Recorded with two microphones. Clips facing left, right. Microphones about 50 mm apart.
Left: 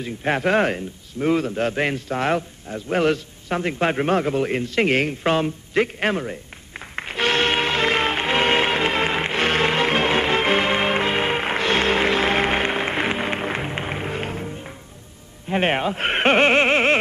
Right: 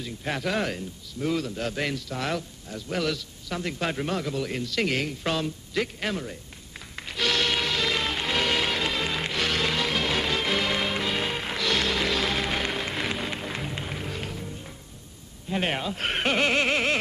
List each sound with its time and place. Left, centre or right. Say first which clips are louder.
0.0 s a man's voice: left 8 dB; left
7.0 s music: left 6 dB; left
15.4 s a sound: left 7 dB; left